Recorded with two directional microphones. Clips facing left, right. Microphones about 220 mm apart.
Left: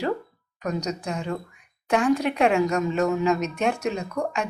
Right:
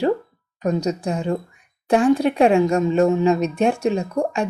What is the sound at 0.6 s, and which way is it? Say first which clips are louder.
Speech: right 7 dB; 30° right (ahead or behind).